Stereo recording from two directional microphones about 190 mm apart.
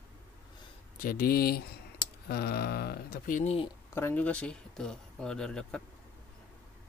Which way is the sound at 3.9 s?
10° left (ahead or behind).